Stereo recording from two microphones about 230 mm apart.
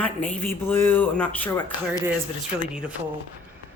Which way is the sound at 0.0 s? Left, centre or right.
Centre.